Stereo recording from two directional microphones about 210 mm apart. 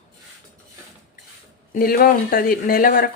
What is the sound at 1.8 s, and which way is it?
Speech, 45° left (ahead or behind).